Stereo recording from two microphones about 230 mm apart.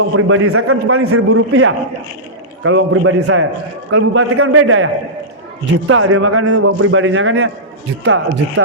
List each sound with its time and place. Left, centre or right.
0.1 s a man's voice: right
5.9 s a man's voice: right